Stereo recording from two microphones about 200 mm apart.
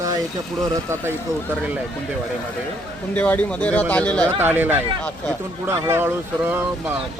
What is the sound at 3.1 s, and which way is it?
Speech, 5° left (ahead or behind).